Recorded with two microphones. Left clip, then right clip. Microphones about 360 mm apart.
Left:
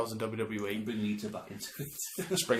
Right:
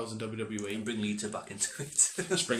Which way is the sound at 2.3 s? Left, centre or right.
Right.